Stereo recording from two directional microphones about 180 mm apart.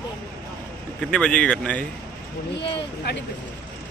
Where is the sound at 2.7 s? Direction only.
70° left (ahead or behind).